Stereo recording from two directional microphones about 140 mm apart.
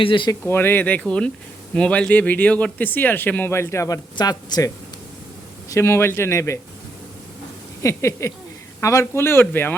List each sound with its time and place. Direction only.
0.0 s speech: 35° left (ahead or behind)
0.3 s speech: 15° left (ahead or behind)
4.1 s a man's voice: 30° left (ahead or behind)
7.8 s a man's voice: 20° left (ahead or behind)